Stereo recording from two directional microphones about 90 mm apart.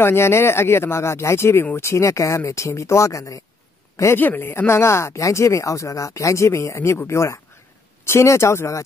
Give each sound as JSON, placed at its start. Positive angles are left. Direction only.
{"t": 0.0, "sound": "speech", "side_deg": 25}